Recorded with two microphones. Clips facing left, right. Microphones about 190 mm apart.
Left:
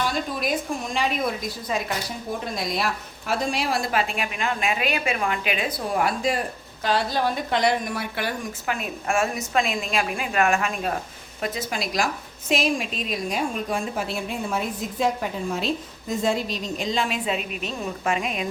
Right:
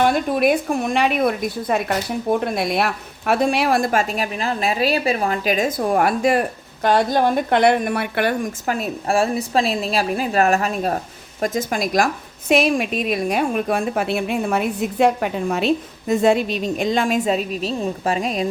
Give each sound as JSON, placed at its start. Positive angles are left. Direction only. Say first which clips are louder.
{"t": 0.0, "sound": "a woman's voice", "louder": "right 9 dB", "side_deg": -60}
{"t": 8.6, "sound": "a woman's voice", "louder": "right 5 dB", "side_deg": -40}